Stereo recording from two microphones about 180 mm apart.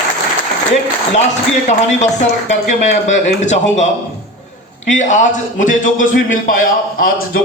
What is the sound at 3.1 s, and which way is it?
Speech, 40° left (ahead or behind).